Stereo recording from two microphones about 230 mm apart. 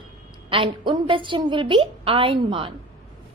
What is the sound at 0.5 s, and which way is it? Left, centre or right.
A woman's voice, right.